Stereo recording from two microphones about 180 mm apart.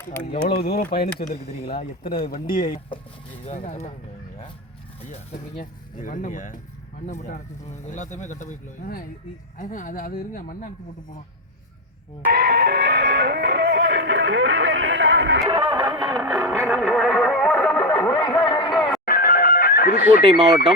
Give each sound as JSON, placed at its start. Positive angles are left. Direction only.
{"t": 0.4, "sound": "speech", "side_deg": 60}
{"t": 3.4, "sound": "speech", "side_deg": 40}
{"t": 5.5, "sound": "speech", "side_deg": 45}
{"t": 12.2, "sound": "music", "side_deg": -65}
{"t": 15.7, "sound": "music", "side_deg": -25}
{"t": 16.0, "sound": "music", "side_deg": 0}
{"t": 18.4, "sound": "a sound", "side_deg": 25}
{"t": 18.7, "sound": "music", "side_deg": 0}
{"t": 19.0, "sound": "music", "side_deg": 55}
{"t": 20.2, "sound": "speech", "side_deg": -25}